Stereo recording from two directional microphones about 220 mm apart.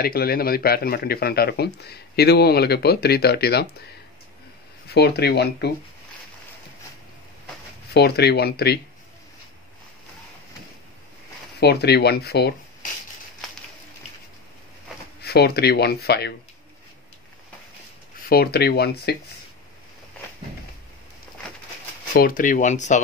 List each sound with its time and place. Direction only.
0.0 s speech: 45° left (ahead or behind)
4.8 s speech: 45° left (ahead or behind)
7.9 s speech: 45° left (ahead or behind)
11.6 s speech: 45° left (ahead or behind)
15.2 s speech: 45° left (ahead or behind)
18.3 s speech: 45° left (ahead or behind)
22.1 s speech: 40° left (ahead or behind)